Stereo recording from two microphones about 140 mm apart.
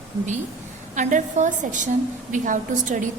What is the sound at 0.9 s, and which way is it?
A woman's voice, 60° right (ahead or behind).